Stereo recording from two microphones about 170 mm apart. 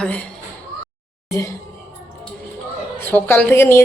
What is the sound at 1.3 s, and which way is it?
Speech, 20° left (ahead or behind).